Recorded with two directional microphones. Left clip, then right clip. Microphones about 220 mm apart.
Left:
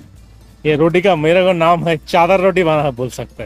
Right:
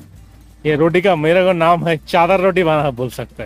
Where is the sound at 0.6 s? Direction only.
Centre (ahead or behind).